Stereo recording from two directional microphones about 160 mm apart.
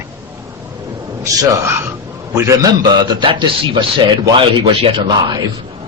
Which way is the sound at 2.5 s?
25° right (ahead or behind).